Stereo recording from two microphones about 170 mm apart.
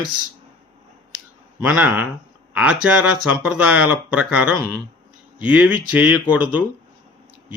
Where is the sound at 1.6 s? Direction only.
10° right (ahead or behind).